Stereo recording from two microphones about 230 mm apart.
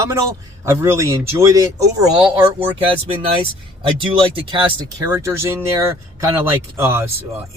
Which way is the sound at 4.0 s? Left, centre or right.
Right.